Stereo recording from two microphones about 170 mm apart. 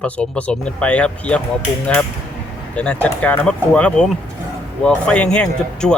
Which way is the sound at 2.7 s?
5° left (ahead or behind).